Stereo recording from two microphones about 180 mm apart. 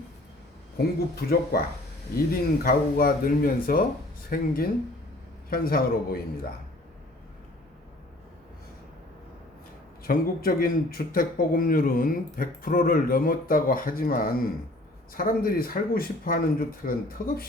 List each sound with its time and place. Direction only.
0.8 s speech: 60° left (ahead or behind)
2.6 s speech: 50° left (ahead or behind)
10.0 s speech: 55° left (ahead or behind)